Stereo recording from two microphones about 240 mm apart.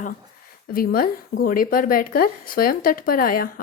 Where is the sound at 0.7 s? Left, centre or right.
Left.